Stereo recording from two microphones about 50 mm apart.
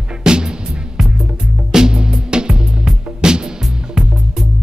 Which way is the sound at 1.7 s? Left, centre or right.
Centre.